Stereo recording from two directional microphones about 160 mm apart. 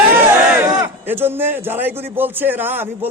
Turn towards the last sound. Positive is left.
turn(degrees=-10)  # may be behind; listen again after turning